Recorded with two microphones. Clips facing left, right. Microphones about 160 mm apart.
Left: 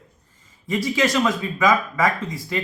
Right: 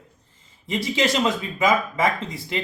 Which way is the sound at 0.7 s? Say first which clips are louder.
Left 2 dB; 25° right (ahead or behind).